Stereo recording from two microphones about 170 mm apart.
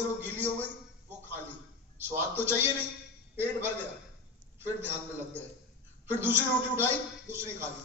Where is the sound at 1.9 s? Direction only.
15° right (ahead or behind).